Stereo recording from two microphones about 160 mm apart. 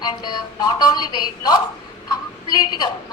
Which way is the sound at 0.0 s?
25° left (ahead or behind).